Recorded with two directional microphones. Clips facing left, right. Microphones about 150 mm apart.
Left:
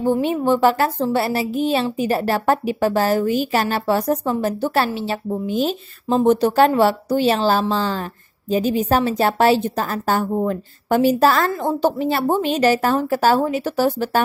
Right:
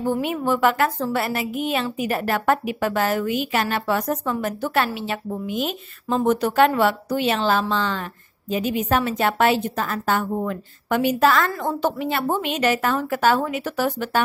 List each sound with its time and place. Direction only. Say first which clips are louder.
0.0 s a woman's voice: left 4 dB; 30° left (ahead or behind)